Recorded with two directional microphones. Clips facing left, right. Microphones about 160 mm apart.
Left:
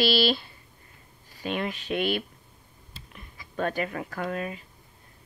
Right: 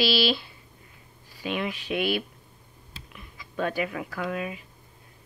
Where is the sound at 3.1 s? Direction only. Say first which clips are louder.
Right 1 dB; 45° left (ahead or behind).